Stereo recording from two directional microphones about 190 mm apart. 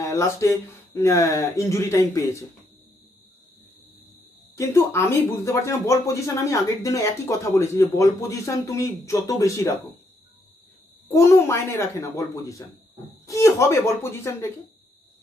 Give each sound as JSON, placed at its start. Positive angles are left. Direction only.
{"t": 0.0, "sound": "speech", "side_deg": 15}
{"t": 4.6, "sound": "speech", "side_deg": 15}
{"t": 11.1, "sound": "speech", "side_deg": 15}